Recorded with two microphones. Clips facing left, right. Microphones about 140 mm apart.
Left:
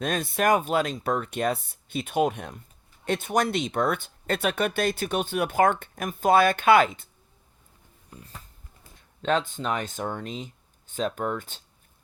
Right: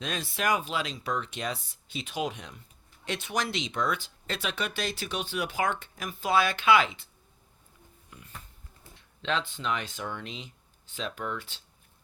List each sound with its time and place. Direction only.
0.0 s speech: 50° left (ahead or behind)
8.1 s a sound: 35° left (ahead or behind)
9.0 s speech: 45° left (ahead or behind)